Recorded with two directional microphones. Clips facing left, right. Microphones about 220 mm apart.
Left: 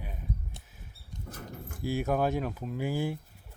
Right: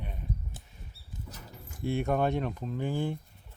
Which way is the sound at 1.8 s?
Centre (ahead or behind).